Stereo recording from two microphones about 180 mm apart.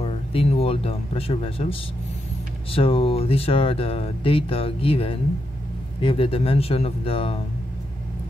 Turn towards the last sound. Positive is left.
turn(degrees=30)  # may be behind; listen again after turning